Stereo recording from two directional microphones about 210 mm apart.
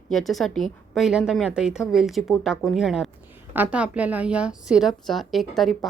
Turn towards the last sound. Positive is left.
turn(degrees=0)  # may be behind; listen again after turning